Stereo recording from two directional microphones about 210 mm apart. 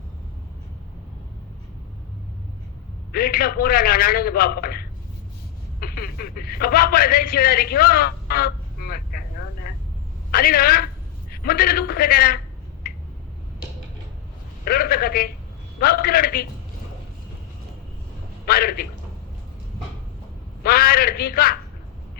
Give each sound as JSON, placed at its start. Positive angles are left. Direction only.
{"t": 3.1, "sound": "a man's voice", "side_deg": 45}
{"t": 9.7, "sound": "vehicle", "side_deg": 40}
{"t": 10.3, "sound": "a man's voice", "side_deg": 45}
{"t": 12.8, "sound": "finger snapping", "side_deg": 45}
{"t": 14.6, "sound": "a man's voice", "side_deg": 45}
{"t": 18.4, "sound": "a man's voice", "side_deg": 45}
{"t": 20.7, "sound": "a man's voice", "side_deg": 45}